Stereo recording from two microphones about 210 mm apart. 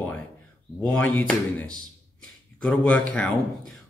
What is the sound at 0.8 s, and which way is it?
Speech, 5° left (ahead or behind).